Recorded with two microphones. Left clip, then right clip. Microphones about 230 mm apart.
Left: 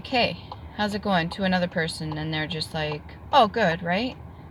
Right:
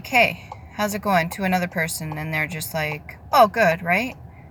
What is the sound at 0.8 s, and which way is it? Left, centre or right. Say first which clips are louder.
Speech: right 4 dB; centre.